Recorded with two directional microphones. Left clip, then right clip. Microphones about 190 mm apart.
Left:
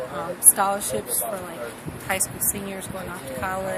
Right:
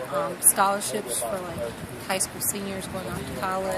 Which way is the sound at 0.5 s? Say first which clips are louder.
Right 1 dB; 5° left (ahead or behind).